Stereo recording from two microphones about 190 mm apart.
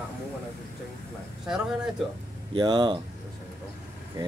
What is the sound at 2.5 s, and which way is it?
Speech, 25° right (ahead or behind).